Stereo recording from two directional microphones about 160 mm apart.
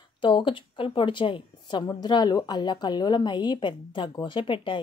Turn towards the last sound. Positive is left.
turn(degrees=30)  # may be behind; listen again after turning